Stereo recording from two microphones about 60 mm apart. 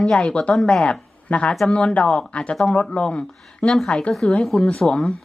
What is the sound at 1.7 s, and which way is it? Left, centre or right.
A woman's voice, centre.